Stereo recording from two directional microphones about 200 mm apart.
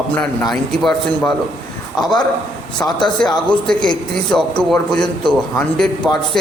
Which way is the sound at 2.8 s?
5° left (ahead or behind).